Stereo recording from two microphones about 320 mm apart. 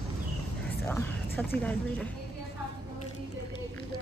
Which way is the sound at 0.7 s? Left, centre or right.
Centre.